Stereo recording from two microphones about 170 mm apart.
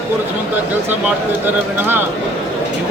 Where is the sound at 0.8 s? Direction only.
10° right (ahead or behind).